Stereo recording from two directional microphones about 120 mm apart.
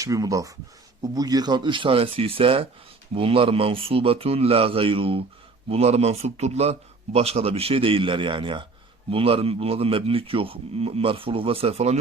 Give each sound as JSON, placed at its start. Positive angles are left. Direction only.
{"t": 0.0, "sound": "a man's voice", "side_deg": -30}